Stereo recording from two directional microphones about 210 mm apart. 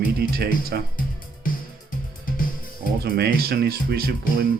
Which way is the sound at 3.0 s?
50° right (ahead or behind).